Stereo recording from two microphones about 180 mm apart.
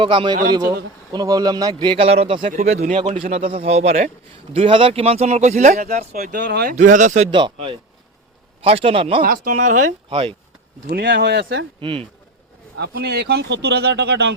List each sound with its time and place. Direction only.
0.0 s speech: 30° right (ahead or behind)
2.5 s speech: 45° right (ahead or behind)
6.1 s speech: 50° right (ahead or behind)
6.7 s speech: 45° right (ahead or behind)
7.3 s speech: 25° right (ahead or behind)
9.2 s speech: 50° right (ahead or behind)
10.1 s speech: 30° right (ahead or behind)
10.8 s speech: 70° right (ahead or behind)
11.8 s speech: 30° right (ahead or behind)
12.7 s speech: 65° right (ahead or behind)